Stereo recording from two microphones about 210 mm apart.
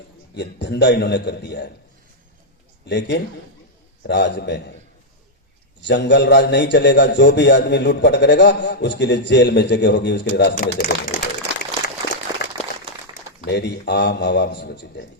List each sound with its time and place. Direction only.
0.3 s a man's voice: 55° left (ahead or behind)
2.8 s a man's voice: 55° left (ahead or behind)
5.8 s a man's voice: 55° left (ahead or behind)
13.5 s a man's voice: 55° left (ahead or behind)